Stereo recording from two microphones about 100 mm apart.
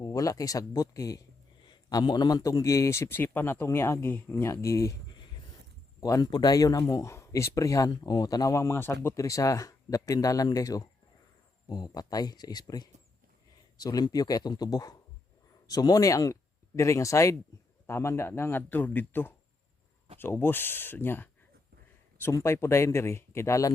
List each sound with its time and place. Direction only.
0.0 s a man's voice: 35° left (ahead or behind)
6.0 s speech: 35° left (ahead or behind)
7.9 s a man's voice: 45° left (ahead or behind)